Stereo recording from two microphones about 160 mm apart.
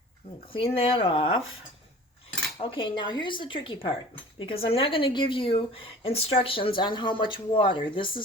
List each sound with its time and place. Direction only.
0.5 s a woman's voice: 35° left (ahead or behind)
2.6 s a woman's voice: 35° left (ahead or behind)